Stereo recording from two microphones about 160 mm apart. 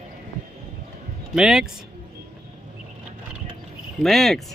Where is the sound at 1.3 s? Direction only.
5° right (ahead or behind).